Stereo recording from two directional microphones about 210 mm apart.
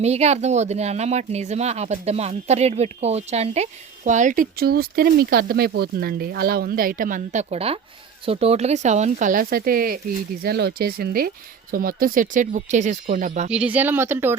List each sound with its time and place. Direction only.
0.0 s speech: 30° right (ahead or behind)
13.5 s speech: 5° right (ahead or behind)